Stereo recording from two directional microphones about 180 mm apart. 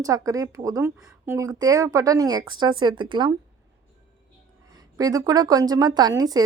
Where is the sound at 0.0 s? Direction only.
20° right (ahead or behind).